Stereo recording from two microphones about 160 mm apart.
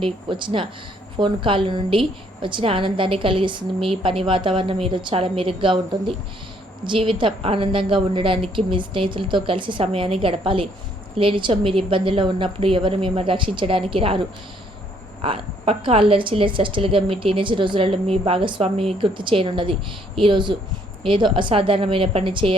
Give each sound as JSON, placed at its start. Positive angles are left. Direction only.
{"t": 0.0, "sound": "a woman's voice", "side_deg": -30}
{"t": 15.2, "sound": "a woman's voice", "side_deg": -35}